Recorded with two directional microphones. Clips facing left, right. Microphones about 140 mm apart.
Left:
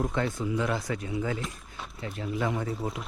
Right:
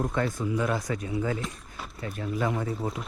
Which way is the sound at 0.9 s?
25° right (ahead or behind).